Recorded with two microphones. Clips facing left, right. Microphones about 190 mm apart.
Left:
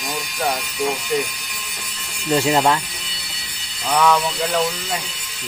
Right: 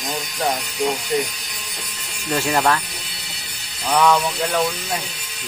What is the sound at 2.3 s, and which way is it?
Music, 20° left (ahead or behind).